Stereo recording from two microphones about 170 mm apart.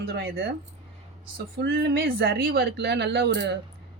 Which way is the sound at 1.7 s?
70° right (ahead or behind).